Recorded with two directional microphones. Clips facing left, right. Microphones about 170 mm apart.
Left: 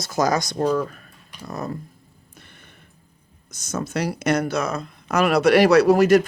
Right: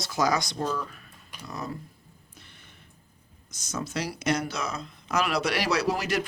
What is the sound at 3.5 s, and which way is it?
Speech, 55° left (ahead or behind).